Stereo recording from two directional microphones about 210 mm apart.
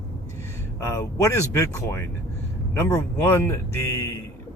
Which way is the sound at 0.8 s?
15° left (ahead or behind).